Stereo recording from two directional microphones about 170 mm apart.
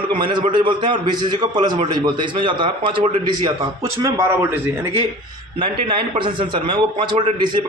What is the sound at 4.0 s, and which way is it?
Speech, 15° right (ahead or behind).